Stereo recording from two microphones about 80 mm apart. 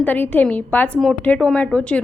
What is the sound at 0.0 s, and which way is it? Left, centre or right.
A woman's voice, left.